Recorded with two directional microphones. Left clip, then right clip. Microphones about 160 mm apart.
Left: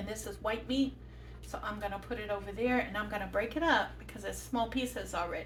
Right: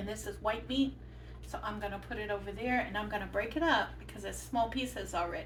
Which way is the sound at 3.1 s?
35° left (ahead or behind).